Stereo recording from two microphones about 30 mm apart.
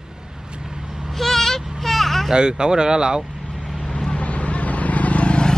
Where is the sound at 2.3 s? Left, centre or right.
Right.